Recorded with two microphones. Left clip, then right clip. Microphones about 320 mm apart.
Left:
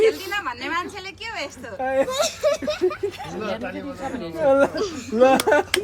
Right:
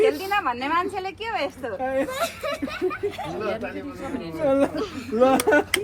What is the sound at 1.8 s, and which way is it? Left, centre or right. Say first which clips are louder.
Speech: left 4 dB; left.